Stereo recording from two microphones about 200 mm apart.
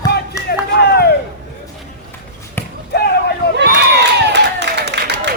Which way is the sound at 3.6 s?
60° right (ahead or behind).